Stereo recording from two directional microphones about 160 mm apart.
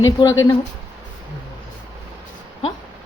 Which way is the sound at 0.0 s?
20° left (ahead or behind).